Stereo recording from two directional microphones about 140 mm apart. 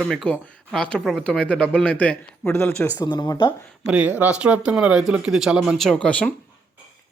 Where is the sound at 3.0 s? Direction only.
30° left (ahead or behind).